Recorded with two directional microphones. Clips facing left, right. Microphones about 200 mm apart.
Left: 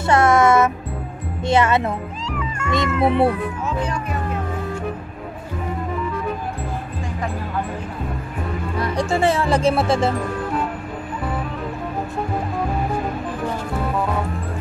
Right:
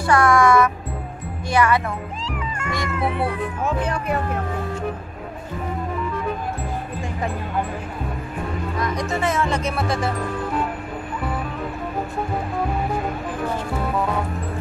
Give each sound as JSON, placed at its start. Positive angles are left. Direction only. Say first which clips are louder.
{"t": 0.0, "sound": "music", "louder": "left 1 dB", "side_deg": 25}
{"t": 1.5, "sound": "speech", "louder": "left 2 dB", "side_deg": 25}
{"t": 3.6, "sound": "speech", "louder": "right 3 dB", "side_deg": -55}
{"t": 8.7, "sound": "music", "louder": "left 4 dB", "side_deg": 30}
{"t": 9.1, "sound": "speech", "louder": "left 5 dB", "side_deg": 30}